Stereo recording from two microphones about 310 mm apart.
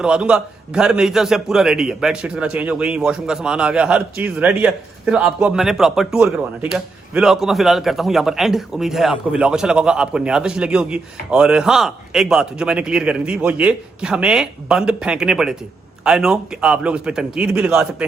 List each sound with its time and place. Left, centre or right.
0.0 s a man's voice: centre